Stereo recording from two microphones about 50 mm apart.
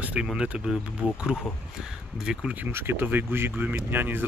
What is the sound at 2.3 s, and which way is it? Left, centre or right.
Speech, centre.